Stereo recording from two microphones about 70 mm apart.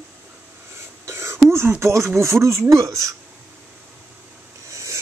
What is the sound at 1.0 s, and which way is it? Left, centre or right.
Whispering, right.